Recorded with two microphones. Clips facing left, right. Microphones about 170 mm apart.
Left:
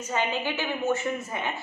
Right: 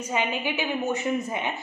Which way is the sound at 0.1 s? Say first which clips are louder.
Even; 15° right (ahead or behind).